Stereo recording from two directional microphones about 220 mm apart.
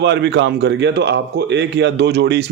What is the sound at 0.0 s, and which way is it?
Speech, 50° right (ahead or behind).